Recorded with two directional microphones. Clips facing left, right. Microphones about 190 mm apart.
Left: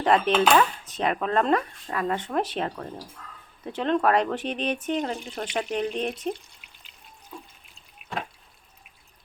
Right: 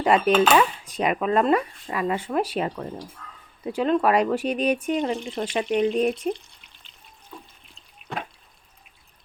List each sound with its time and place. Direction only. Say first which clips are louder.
0.0 s speech: right 2 dB; 10° right (ahead or behind)